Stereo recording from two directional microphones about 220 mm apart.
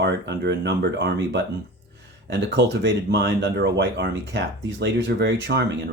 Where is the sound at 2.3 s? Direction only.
50° right (ahead or behind).